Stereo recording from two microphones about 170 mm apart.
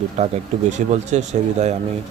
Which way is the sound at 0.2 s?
40° right (ahead or behind).